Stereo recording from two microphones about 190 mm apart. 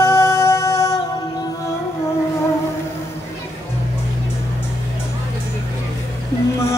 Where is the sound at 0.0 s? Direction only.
15° left (ahead or behind).